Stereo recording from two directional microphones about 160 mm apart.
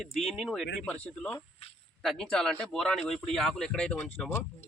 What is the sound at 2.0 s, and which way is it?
Speech, 5° left (ahead or behind).